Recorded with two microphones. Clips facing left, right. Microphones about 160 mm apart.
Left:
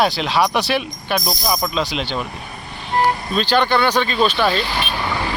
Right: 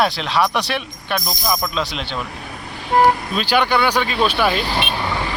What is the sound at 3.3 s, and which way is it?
Speech, 10° right (ahead or behind).